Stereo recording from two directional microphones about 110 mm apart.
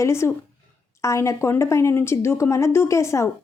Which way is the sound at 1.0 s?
25° left (ahead or behind).